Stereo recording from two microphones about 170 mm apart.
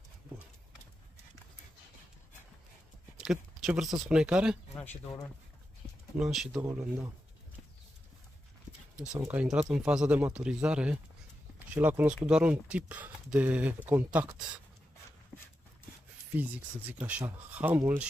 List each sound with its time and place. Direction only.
3.2 s a sound: centre (ahead or behind)
4.1 s speech: 5° right (ahead or behind)
4.7 s speech: 10° left (ahead or behind)
6.1 s speech: 5° right (ahead or behind)
6.7 s speech: 15° right (ahead or behind)
8.9 s speech: 5° right (ahead or behind)
16.3 s speech: 10° right (ahead or behind)